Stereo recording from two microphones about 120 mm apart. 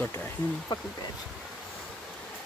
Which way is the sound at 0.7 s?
35° left (ahead or behind).